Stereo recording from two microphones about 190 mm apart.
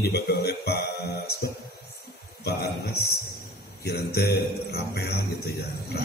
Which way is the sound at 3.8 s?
60° left (ahead or behind).